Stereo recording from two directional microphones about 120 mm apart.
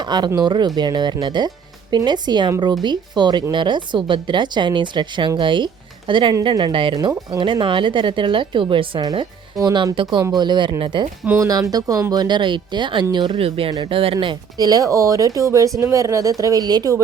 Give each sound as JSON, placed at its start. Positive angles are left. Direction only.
{"t": 0.0, "sound": "speech", "side_deg": -35}
{"t": 9.0, "sound": "speech", "side_deg": -30}
{"t": 9.9, "sound": "speech", "side_deg": -45}
{"t": 11.3, "sound": "speech", "side_deg": -25}
{"t": 14.6, "sound": "speech", "side_deg": -30}